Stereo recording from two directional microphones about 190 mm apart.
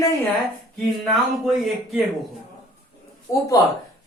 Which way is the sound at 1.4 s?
Centre (ahead or behind).